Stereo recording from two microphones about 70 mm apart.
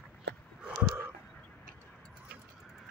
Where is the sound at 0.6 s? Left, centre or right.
Centre.